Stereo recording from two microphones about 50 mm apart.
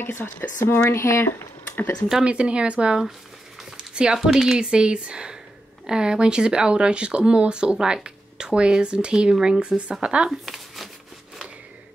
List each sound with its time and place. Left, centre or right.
0.0 s speech: left
0.8 s speech: left
2.2 s speech: right
3.7 s a sound: centre
4.3 s a woman's voice: centre
10.4 s crumpling: centre